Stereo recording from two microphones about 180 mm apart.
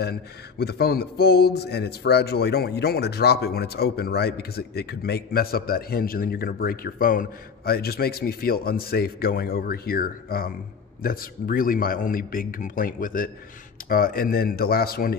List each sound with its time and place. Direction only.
0.0 s mantra: 60° left (ahead or behind)
11.0 s a man's voice: 55° left (ahead or behind)
13.8 s mantra: 55° left (ahead or behind)